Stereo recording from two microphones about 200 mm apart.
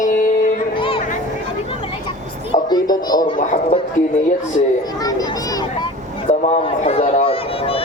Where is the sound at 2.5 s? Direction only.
20° left (ahead or behind).